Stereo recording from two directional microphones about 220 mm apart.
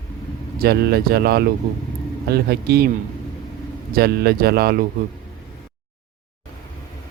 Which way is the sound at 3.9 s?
45° right (ahead or behind).